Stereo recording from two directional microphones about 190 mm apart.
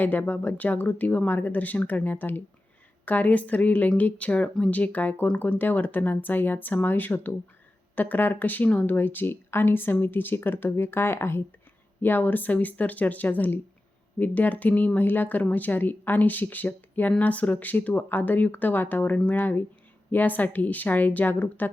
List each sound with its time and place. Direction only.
0.0 s speech: 10° left (ahead or behind)